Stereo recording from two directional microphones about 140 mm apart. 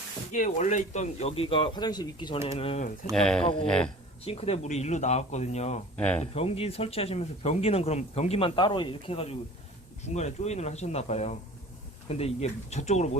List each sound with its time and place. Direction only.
0.3 s speech: 65° left (ahead or behind); by 2.8 s 45° left (ahead or behind)
3.1 s speech: 5° left (ahead or behind)
3.4 s speech: 40° left (ahead or behind)
6.0 s speech: 10° left (ahead or behind)
6.3 s speech: 45° left (ahead or behind)